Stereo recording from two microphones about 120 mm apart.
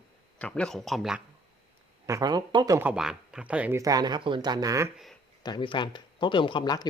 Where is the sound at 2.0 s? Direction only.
30° right (ahead or behind).